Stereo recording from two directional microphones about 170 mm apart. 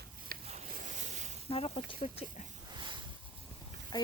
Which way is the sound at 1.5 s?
35° left (ahead or behind).